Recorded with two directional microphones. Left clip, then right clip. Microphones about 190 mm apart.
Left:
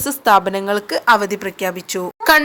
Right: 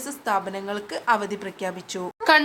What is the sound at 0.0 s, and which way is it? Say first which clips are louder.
A woman's voice: left 12 dB; 50° left (ahead or behind).